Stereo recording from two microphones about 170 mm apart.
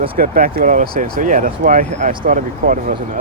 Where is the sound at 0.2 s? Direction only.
60° right (ahead or behind).